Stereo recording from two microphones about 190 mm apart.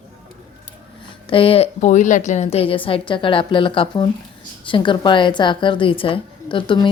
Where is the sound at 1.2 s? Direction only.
30° left (ahead or behind).